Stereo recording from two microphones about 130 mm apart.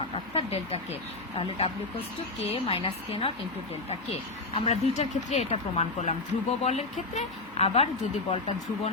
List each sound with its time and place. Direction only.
0.1 s a woman's voice: 50° left (ahead or behind)
4.5 s a woman's voice: 50° left (ahead or behind)
8.3 s speech: 65° left (ahead or behind)